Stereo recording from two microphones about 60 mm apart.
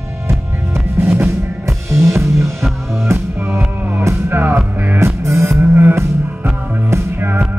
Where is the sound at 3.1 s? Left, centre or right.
Right.